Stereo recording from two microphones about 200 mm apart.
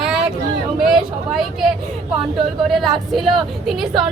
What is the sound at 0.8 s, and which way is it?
Vehicle, centre (ahead or behind).